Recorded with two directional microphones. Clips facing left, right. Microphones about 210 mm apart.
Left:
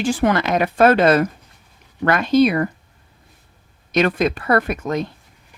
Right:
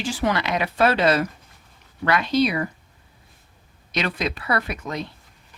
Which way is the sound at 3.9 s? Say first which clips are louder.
Left 8 dB; 50° left (ahead or behind).